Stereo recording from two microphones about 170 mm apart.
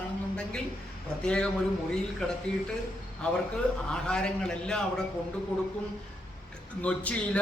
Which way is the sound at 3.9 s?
5° left (ahead or behind).